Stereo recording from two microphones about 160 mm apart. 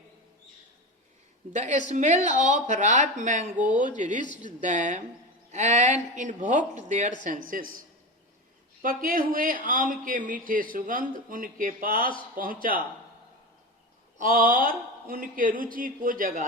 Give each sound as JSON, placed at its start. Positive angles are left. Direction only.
{"t": 1.5, "sound": "speech", "side_deg": -50}
{"t": 7.3, "sound": "a man's voice", "side_deg": -60}
{"t": 8.8, "sound": "a man's voice", "side_deg": -60}
{"t": 14.2, "sound": "a man's voice", "side_deg": -60}